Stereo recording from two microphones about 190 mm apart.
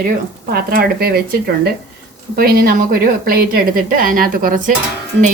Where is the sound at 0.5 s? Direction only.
50° right (ahead or behind).